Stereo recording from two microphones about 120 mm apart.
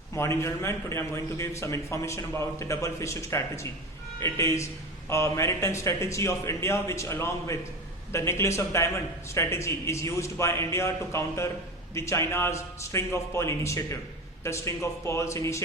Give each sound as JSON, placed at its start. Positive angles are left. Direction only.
{"t": 0.2, "sound": "a man's voice", "side_deg": 25}